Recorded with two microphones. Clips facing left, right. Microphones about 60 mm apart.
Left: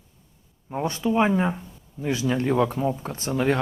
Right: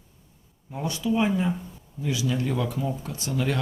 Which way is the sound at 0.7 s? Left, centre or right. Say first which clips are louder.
Left 3 dB; left.